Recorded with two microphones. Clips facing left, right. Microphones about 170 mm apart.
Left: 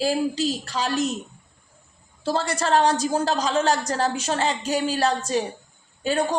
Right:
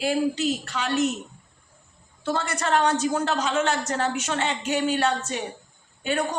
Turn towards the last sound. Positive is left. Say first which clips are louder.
# left 3 dB
turn(degrees=35)  # may be behind; listen again after turning